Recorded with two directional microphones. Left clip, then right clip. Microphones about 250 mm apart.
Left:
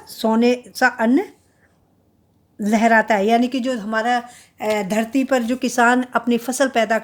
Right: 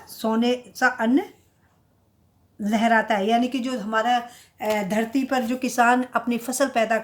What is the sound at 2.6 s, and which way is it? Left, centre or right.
A woman's voice, left.